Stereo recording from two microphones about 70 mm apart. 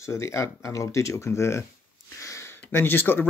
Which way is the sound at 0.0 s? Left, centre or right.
Left.